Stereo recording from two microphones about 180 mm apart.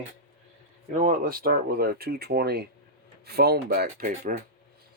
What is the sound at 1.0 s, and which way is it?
Speech, 50° right (ahead or behind).